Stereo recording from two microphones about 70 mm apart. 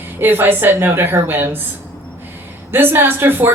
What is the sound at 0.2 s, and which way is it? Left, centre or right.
Speech, right.